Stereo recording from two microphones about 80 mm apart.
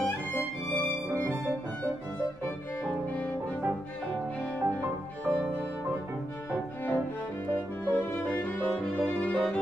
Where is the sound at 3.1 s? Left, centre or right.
Left.